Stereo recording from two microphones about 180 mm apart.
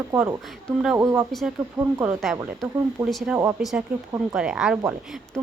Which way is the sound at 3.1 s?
Centre (ahead or behind).